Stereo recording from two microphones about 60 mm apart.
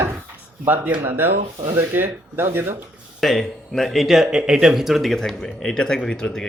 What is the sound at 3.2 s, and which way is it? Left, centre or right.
Speech, centre.